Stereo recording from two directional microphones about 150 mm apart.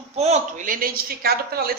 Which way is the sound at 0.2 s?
50° right (ahead or behind).